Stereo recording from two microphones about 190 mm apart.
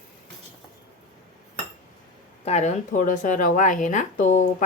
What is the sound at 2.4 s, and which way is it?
Speech, 35° left (ahead or behind).